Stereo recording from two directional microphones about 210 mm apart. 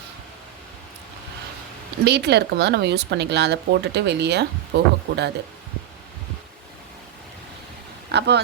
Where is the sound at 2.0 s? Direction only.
55° right (ahead or behind).